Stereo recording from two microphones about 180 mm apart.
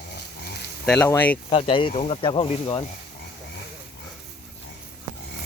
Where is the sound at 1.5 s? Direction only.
30° left (ahead or behind).